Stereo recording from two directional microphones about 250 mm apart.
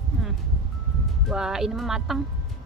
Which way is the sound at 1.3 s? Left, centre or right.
Centre.